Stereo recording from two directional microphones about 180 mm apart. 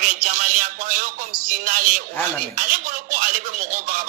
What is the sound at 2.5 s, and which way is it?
Speech, 45° right (ahead or behind).